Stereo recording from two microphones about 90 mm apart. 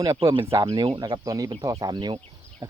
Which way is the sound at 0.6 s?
60° right (ahead or behind).